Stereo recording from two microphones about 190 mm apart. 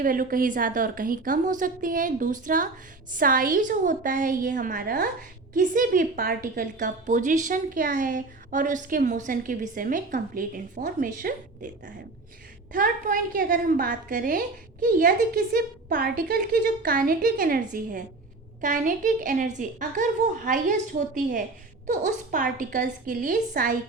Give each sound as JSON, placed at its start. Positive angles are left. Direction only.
{"t": 0.0, "sound": "a woman's voice", "side_deg": -45}
{"t": 12.7, "sound": "a woman's voice", "side_deg": -45}
{"t": 21.8, "sound": "a woman's voice", "side_deg": -40}